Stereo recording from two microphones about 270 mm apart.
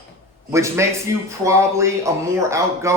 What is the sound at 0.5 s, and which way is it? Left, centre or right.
Speech, centre.